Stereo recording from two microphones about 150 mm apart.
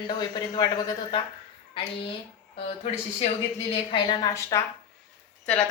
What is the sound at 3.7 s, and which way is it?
Speech, 35° left (ahead or behind).